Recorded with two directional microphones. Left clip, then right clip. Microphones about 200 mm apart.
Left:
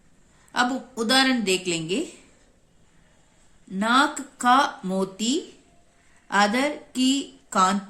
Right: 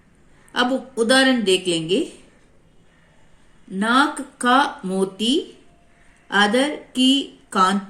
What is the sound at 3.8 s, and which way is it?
Speech, 35° left (ahead or behind).